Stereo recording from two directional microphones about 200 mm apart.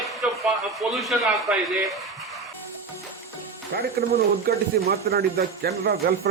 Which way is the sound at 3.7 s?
50° right (ahead or behind).